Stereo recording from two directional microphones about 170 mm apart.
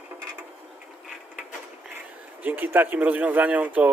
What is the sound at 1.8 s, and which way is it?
Speech, 10° right (ahead or behind).